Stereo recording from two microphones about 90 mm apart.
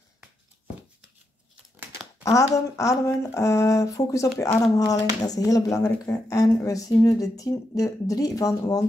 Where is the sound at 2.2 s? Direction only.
40° left (ahead or behind).